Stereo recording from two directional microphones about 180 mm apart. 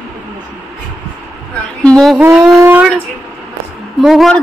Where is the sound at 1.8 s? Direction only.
5° left (ahead or behind).